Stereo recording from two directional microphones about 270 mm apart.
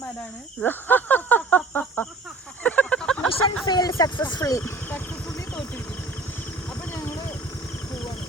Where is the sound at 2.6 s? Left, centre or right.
Centre.